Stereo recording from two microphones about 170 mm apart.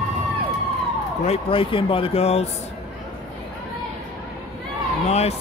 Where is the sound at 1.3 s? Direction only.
30° left (ahead or behind).